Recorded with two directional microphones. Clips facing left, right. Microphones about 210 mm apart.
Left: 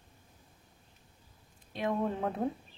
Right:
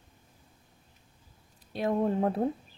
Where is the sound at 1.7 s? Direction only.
35° right (ahead or behind).